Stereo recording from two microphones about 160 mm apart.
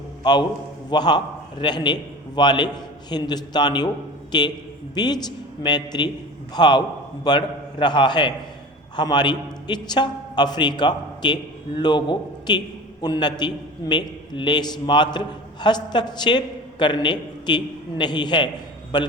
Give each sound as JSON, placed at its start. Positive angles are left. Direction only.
{"t": 0.2, "sound": "a man's voice", "side_deg": 25}